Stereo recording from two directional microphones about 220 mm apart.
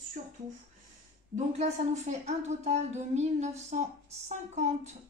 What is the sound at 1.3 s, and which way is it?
A woman's voice, 30° right (ahead or behind).